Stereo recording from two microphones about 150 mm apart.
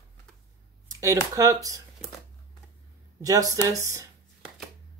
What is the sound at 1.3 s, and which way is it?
Speech, 20° right (ahead or behind).